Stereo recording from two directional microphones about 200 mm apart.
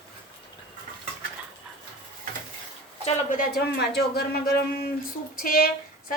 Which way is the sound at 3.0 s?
35° left (ahead or behind).